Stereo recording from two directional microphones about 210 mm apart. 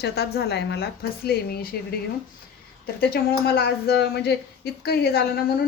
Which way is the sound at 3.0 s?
50° left (ahead or behind).